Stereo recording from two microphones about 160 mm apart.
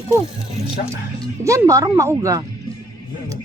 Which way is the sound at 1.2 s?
20° right (ahead or behind).